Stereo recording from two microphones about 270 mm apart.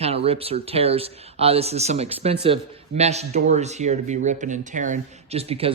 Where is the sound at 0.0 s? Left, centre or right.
Right.